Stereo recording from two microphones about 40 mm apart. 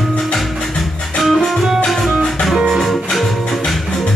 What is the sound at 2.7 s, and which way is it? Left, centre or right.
Music, centre.